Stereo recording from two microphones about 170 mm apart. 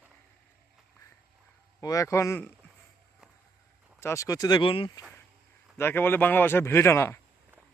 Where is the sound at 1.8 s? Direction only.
20° left (ahead or behind).